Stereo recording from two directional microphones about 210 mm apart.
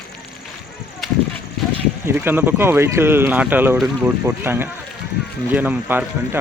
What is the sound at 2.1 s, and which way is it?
Speech, 10° right (ahead or behind).